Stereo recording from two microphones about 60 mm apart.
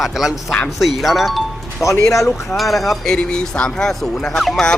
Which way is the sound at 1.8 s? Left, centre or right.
Left.